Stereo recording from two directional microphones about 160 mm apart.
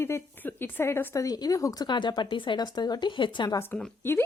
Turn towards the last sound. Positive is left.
turn(degrees=15)  # may be behind; listen again after turning